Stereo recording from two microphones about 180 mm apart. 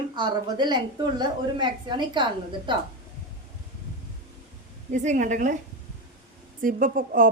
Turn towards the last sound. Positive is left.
turn(degrees=-50)  # may be behind; listen again after turning